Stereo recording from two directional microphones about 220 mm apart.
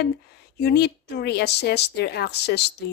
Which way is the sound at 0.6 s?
50° left (ahead or behind).